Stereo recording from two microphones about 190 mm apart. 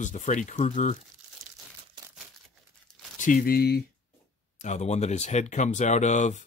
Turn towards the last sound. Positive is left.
turn(degrees=40)  # may be behind; listen again after turning